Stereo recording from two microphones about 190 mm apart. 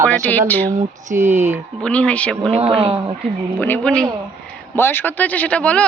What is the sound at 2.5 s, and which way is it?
Speech, 30° right (ahead or behind).